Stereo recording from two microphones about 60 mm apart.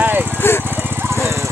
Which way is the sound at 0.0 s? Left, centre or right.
Right.